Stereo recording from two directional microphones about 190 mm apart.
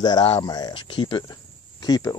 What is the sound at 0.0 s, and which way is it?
Speech, 20° left (ahead or behind).